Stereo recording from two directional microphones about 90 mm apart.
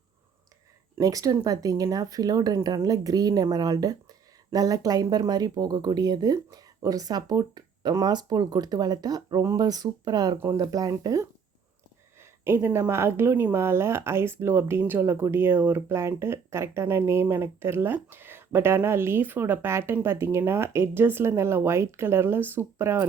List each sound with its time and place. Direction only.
0.9 s speech: 40° right (ahead or behind)
12.5 s speech: 25° right (ahead or behind)